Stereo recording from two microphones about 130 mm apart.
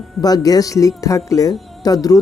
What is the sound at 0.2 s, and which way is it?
Speech, 30° left (ahead or behind).